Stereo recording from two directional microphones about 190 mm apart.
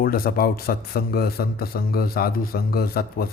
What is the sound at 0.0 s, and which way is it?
Speech, 50° left (ahead or behind).